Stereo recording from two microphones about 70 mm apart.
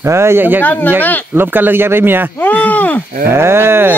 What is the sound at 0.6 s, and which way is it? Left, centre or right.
Speech, left.